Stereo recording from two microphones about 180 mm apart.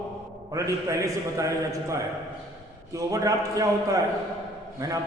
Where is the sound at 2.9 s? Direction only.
20° right (ahead or behind).